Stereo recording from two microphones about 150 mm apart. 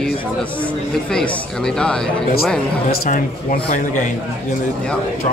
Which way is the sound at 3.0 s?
65° left (ahead or behind).